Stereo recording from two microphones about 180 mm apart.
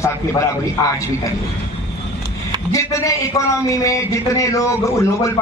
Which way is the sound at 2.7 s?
15° left (ahead or behind).